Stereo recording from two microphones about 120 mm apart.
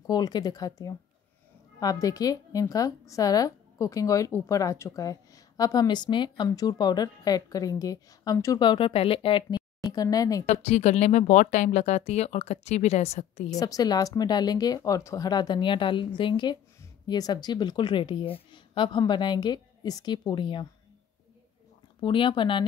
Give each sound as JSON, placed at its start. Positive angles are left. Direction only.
{"t": 0.0, "sound": "speech", "side_deg": 35}
{"t": 8.5, "sound": "speech", "side_deg": 45}
{"t": 9.9, "sound": "speech", "side_deg": 30}
{"t": 10.4, "sound": "speech", "side_deg": 65}
{"t": 13.6, "sound": "speech", "side_deg": 30}
{"t": 22.0, "sound": "speech", "side_deg": 45}